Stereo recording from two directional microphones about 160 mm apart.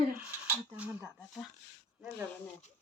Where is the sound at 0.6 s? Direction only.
10° right (ahead or behind).